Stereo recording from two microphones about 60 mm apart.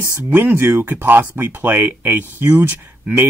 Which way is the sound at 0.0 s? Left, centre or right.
Right.